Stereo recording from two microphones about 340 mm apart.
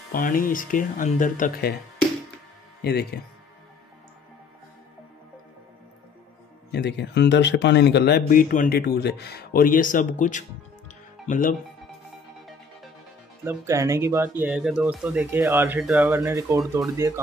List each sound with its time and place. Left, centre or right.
0.1 s speech: left
2.8 s speech: left
6.7 s speech: left
13.4 s speech: centre